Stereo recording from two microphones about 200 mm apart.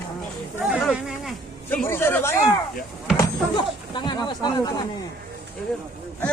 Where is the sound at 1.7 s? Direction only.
10° left (ahead or behind).